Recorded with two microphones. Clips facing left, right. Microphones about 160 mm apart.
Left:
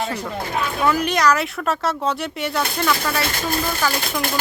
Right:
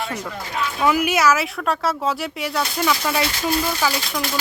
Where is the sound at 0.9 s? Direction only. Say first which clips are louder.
Right 1 dB; 10° right (ahead or behind).